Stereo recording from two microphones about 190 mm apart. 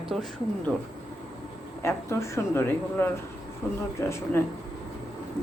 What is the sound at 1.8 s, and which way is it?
Speech, 15° left (ahead or behind).